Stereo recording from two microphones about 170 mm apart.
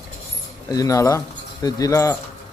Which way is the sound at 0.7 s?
20° left (ahead or behind).